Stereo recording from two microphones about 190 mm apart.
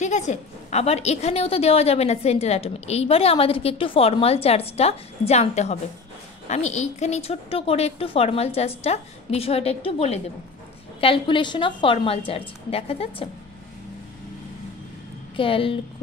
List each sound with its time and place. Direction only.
0.0 s a woman's voice: 40° left (ahead or behind)
15.3 s a woman's voice: 30° left (ahead or behind)